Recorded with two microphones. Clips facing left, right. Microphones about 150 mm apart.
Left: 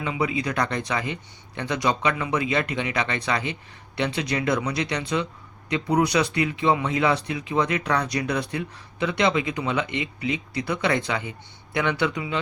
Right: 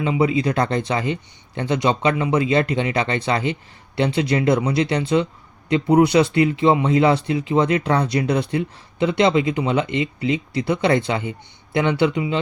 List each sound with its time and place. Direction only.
0.0 s speech: 30° right (ahead or behind)